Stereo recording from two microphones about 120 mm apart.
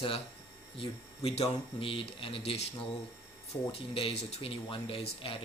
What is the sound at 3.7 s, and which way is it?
Speech, 55° left (ahead or behind).